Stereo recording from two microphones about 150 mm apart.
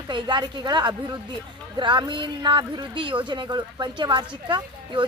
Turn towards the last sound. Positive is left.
turn(degrees=-30)  # may be behind; listen again after turning